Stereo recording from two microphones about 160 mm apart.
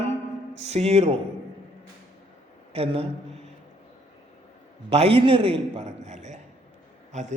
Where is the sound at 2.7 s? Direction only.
40° right (ahead or behind).